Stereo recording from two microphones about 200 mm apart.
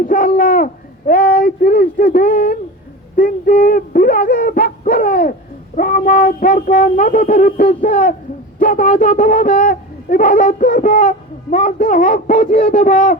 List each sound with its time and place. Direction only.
0.0 s speech: 45° left (ahead or behind)
3.2 s a sound: 45° left (ahead or behind)
5.7 s a man's voice: 45° left (ahead or behind)